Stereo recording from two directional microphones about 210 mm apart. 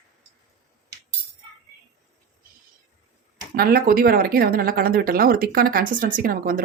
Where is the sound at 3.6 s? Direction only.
45° right (ahead or behind).